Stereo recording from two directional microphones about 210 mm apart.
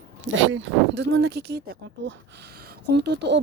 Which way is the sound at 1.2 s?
50° right (ahead or behind).